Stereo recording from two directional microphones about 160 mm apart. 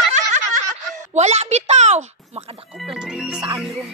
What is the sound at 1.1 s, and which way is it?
Speech, 45° right (ahead or behind).